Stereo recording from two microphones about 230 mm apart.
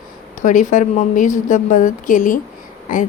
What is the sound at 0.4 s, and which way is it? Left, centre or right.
Speech, left.